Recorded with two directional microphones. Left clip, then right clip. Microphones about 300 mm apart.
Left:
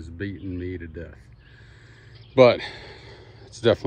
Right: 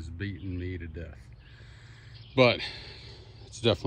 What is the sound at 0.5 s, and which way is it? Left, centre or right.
Speech, centre.